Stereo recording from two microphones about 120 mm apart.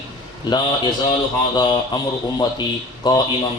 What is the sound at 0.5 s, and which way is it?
A man's voice, 35° left (ahead or behind).